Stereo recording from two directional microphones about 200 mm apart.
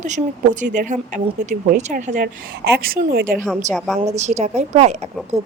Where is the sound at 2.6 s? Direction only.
50° right (ahead or behind).